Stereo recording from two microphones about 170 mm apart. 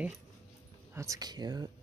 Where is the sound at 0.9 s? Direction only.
20° right (ahead or behind).